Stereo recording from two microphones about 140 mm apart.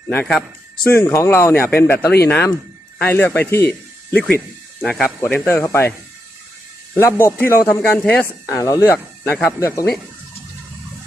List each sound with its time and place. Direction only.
0.1 s speech: 10° left (ahead or behind)
4.8 s speech: 5° left (ahead or behind)
6.9 s speech: 20° left (ahead or behind)
8.4 s speech: 20° left (ahead or behind)